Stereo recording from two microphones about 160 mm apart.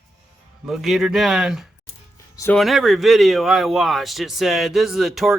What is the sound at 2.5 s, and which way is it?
Speech, centre (ahead or behind).